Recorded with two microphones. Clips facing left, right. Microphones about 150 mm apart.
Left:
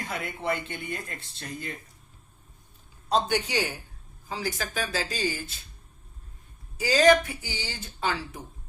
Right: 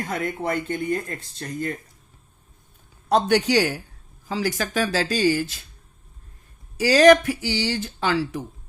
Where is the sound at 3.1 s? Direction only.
75° right (ahead or behind).